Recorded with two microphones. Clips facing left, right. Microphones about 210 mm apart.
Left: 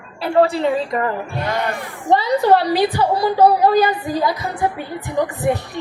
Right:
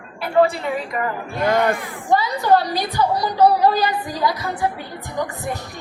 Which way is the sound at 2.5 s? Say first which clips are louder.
Left 1 dB; 30° left (ahead or behind).